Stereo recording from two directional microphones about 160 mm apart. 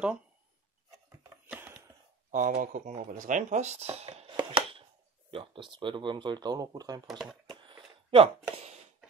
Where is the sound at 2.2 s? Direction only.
55° right (ahead or behind); by 7.0 s 25° right (ahead or behind).